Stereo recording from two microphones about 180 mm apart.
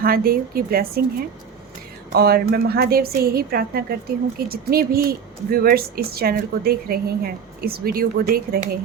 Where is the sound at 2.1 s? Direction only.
60° right (ahead or behind).